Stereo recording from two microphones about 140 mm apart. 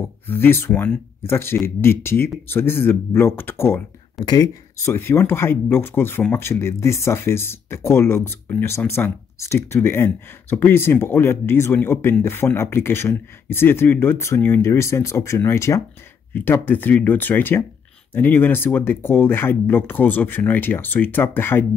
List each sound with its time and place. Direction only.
0.3 s speech: 15° left (ahead or behind)
4.2 s speech: 30° left (ahead or behind)